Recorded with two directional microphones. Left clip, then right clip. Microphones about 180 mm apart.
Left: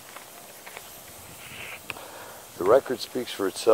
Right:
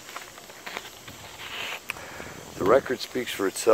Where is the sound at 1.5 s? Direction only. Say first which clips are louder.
Right 6 dB; 30° right (ahead or behind).